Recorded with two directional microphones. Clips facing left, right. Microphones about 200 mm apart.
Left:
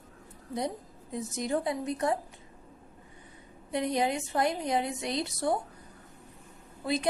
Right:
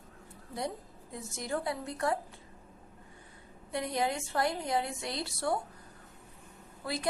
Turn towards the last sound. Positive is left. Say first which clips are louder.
# left 6 dB
turn(degrees=20)  # may be behind; listen again after turning